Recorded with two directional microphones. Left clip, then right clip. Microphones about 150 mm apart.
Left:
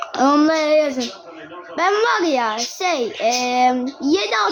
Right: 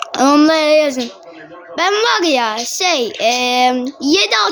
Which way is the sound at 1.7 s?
15° right (ahead or behind).